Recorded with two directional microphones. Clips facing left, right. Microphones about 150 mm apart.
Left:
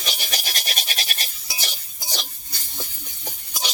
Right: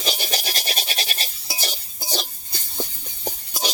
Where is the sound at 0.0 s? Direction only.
30° right (ahead or behind).